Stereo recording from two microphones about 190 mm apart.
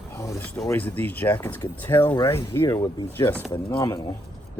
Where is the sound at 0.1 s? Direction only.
15° left (ahead or behind).